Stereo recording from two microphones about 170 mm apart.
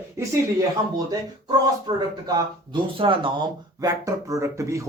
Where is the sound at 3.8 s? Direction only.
20° right (ahead or behind).